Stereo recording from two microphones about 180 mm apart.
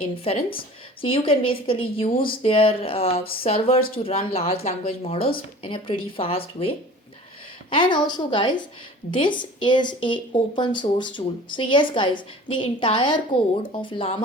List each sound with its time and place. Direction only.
0.3 s speech: 35° left (ahead or behind)